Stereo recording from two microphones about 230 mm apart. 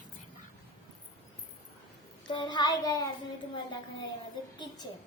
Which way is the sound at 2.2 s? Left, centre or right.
Centre.